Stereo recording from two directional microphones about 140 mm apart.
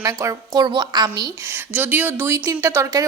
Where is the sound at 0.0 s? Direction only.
20° right (ahead or behind).